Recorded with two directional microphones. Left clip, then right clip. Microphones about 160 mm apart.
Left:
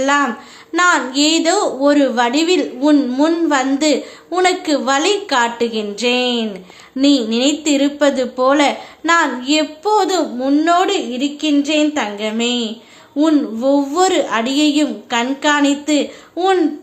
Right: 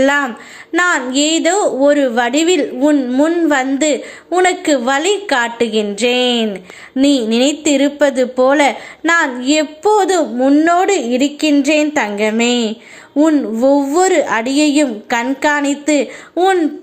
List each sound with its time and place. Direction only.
0.0 s a woman's voice: 25° right (ahead or behind)
4.3 s a woman's voice: 10° right (ahead or behind); by 12.7 s 35° right (ahead or behind)
13.1 s a woman's voice: 20° right (ahead or behind)
13.6 s a woman's voice: 35° right (ahead or behind)